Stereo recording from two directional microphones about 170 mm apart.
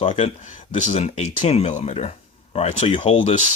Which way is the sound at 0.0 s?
35° left (ahead or behind).